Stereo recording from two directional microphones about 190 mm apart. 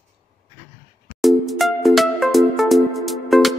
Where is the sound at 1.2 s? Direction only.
Centre (ahead or behind).